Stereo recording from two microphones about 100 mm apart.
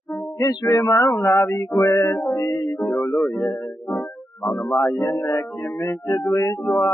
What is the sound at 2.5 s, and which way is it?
Music, 40° left (ahead or behind).